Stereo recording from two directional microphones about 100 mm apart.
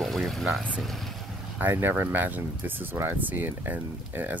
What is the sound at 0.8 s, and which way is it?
Vehicle, centre (ahead or behind).